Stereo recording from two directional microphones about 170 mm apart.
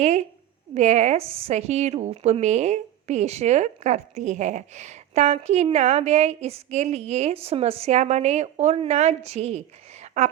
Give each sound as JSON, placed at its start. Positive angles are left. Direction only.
{"t": 0.0, "sound": "speech", "side_deg": -40}